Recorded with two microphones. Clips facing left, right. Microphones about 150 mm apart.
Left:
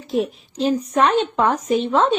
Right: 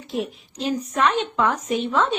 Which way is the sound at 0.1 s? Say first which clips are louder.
Left 6 dB; 35° left (ahead or behind).